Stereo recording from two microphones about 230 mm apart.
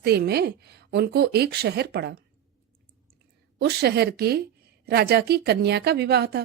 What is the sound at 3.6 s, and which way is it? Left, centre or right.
Speech, right.